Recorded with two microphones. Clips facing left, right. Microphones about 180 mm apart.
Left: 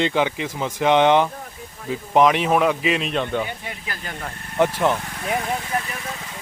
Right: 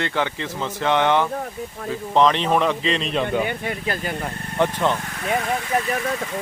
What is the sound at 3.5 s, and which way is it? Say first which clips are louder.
Speech: right 7 dB; 55° right (ahead or behind).